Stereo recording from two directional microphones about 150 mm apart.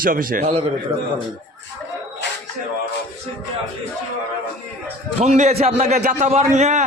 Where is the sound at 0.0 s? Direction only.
70° right (ahead or behind).